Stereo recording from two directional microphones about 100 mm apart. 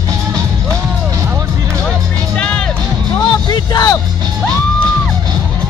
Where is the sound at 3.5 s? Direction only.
40° left (ahead or behind).